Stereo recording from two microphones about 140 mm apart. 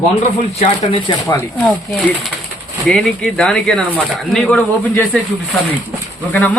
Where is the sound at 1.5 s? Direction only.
5° left (ahead or behind).